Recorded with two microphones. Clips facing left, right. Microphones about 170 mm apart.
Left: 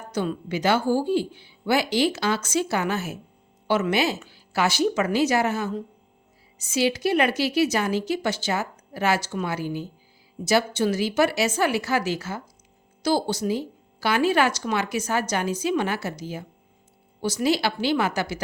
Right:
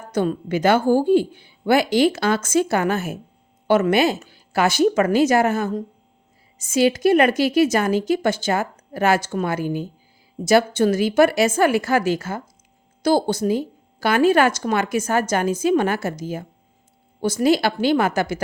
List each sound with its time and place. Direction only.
0.1 s a woman's voice: 50° right (ahead or behind)